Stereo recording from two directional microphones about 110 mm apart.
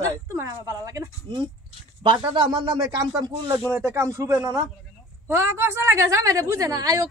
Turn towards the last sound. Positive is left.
turn(degrees=-35)  # may be behind; listen again after turning